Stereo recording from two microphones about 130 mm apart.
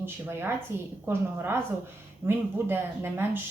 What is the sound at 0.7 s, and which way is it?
Speech, 20° right (ahead or behind).